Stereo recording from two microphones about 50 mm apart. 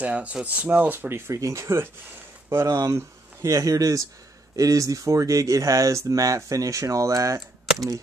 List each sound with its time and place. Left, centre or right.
0.0 s speech: right
1.0 s speech: right
1.3 s speech: right